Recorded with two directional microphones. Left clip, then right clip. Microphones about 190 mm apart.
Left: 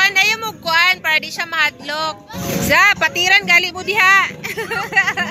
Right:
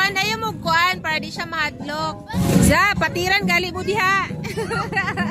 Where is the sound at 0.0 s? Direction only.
20° right (ahead or behind).